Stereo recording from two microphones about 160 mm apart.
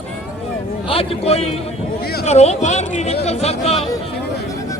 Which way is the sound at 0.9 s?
35° left (ahead or behind).